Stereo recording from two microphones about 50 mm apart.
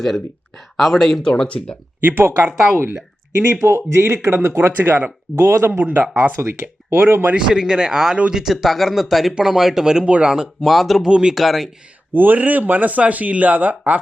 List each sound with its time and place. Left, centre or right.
0.0 s speech: centre
1.2 s speech: centre
2.0 s speech: right
6.3 s speech: right
6.9 s speech: right
7.3 s speech: centre
10.3 s speech: centre
11.1 s speech: centre
11.3 s speech: centre
12.1 s speech: right